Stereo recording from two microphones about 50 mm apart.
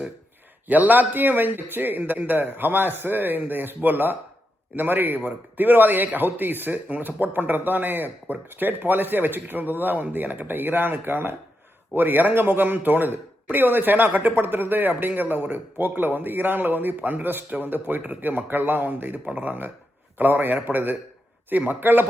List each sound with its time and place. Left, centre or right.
0.7 s speech: right